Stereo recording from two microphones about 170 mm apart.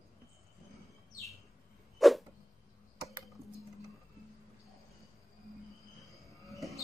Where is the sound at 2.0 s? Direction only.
Centre (ahead or behind).